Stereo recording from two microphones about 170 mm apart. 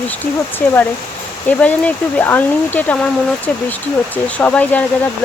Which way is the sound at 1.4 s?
10° left (ahead or behind).